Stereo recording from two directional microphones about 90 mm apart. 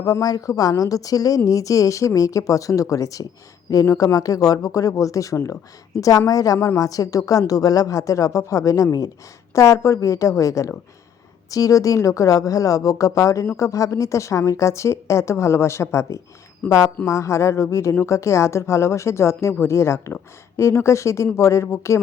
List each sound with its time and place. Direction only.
0.0 s a woman's voice: 45° left (ahead or behind)
16.6 s speech: 10° left (ahead or behind)
17.1 s a woman's voice: 35° left (ahead or behind)